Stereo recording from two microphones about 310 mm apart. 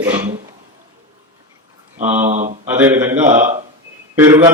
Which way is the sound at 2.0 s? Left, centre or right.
Right.